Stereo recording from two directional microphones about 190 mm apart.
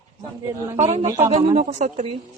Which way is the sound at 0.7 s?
35° right (ahead or behind).